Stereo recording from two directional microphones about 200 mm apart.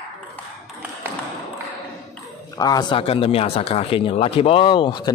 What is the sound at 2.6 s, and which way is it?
A man's voice, 20° left (ahead or behind).